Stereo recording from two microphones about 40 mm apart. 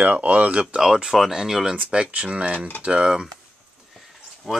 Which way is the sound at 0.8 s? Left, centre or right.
Centre.